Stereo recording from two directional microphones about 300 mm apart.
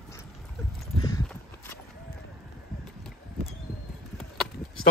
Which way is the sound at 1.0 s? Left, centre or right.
Centre.